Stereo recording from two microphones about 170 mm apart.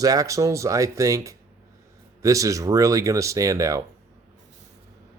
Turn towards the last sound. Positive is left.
turn(degrees=-20)  # may be behind; listen again after turning